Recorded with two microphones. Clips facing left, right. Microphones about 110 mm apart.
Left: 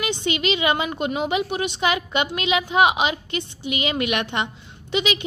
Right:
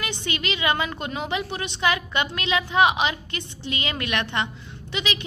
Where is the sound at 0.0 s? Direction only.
20° left (ahead or behind).